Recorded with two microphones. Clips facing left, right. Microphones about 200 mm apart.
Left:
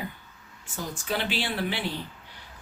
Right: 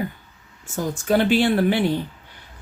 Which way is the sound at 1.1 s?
50° right (ahead or behind).